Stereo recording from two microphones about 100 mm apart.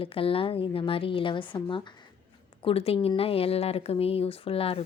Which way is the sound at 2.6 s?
70° left (ahead or behind).